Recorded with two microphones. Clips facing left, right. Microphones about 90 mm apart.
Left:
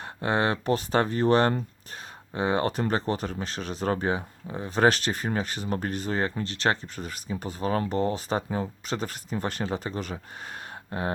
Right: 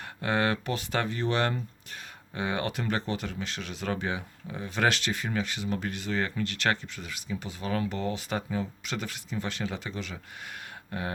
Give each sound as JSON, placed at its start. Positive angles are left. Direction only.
{"t": 0.0, "sound": "speech", "side_deg": 30}
{"t": 10.9, "sound": "speech", "side_deg": 30}